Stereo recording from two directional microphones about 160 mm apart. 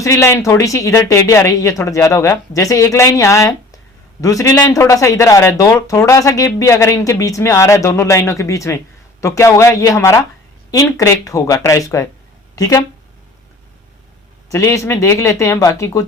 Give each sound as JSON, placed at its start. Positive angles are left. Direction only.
{"t": 0.0, "sound": "a man's voice", "side_deg": 20}
{"t": 14.5, "sound": "a man's voice", "side_deg": 20}